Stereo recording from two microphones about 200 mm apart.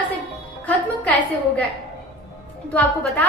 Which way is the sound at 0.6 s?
10° left (ahead or behind).